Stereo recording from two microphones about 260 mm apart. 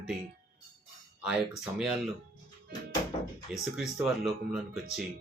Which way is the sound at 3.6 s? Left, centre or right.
Centre.